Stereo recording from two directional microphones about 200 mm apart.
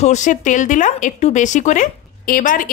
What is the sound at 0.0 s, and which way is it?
A woman's voice, 35° left (ahead or behind).